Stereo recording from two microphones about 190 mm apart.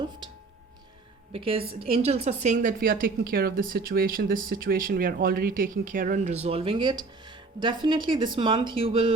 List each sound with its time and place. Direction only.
1.3 s a woman's voice: 30° right (ahead or behind)